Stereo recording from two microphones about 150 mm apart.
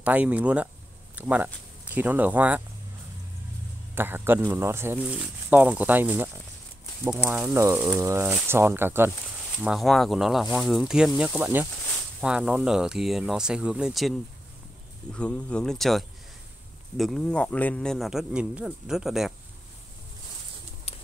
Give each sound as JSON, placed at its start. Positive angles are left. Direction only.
{"t": 0.0, "sound": "speech", "side_deg": -10}
{"t": 3.9, "sound": "speech", "side_deg": -15}
{"t": 9.6, "sound": "speech", "side_deg": 0}
{"t": 15.1, "sound": "speech", "side_deg": 5}